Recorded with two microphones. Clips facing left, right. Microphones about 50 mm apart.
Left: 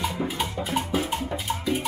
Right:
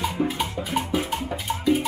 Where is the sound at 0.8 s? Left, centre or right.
Centre.